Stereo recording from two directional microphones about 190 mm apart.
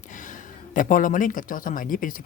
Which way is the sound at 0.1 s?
45° left (ahead or behind).